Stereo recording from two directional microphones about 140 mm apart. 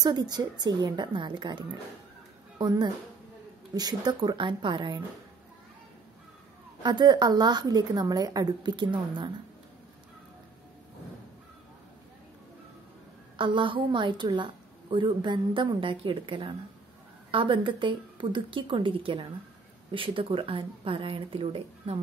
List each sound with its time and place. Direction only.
0.0 s a woman's voice: 30° right (ahead or behind)
2.6 s a woman's voice: 30° right (ahead or behind)
6.8 s a woman's voice: 30° right (ahead or behind)
13.4 s a woman's voice: 35° right (ahead or behind)